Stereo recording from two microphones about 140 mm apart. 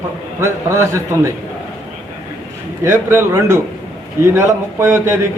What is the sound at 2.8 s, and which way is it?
A man's voice, 20° right (ahead or behind).